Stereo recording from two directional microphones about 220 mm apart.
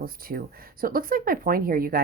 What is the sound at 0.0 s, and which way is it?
Speech, 40° right (ahead or behind).